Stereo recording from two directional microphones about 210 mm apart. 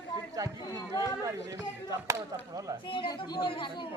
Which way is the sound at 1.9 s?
15° right (ahead or behind).